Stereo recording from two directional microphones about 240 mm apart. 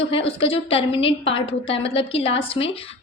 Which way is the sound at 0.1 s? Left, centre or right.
Left.